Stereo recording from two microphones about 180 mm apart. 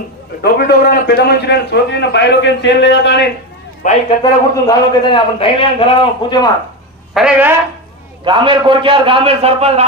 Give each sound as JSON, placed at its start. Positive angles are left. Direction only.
{"t": 0.4, "sound": "a man's voice", "side_deg": 65}
{"t": 3.8, "sound": "a man's voice", "side_deg": 45}
{"t": 4.2, "sound": "a man's voice", "side_deg": 25}
{"t": 7.2, "sound": "speech", "side_deg": -5}
{"t": 8.3, "sound": "a man's voice", "side_deg": -25}